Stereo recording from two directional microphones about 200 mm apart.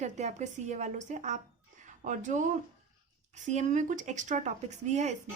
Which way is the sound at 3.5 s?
35° right (ahead or behind).